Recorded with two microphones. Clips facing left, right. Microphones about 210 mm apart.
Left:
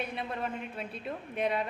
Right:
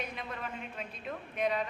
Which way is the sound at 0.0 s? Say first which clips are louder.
Left 5 dB; 30° left (ahead or behind).